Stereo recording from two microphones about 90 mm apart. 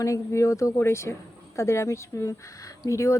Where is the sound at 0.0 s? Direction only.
35° left (ahead or behind).